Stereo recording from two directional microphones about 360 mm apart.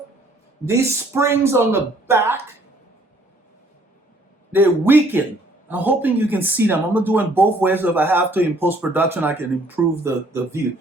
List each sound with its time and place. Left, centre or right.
0.6 s speech: centre
4.5 s speech: centre